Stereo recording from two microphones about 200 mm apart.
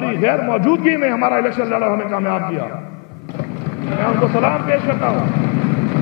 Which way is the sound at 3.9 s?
20° left (ahead or behind).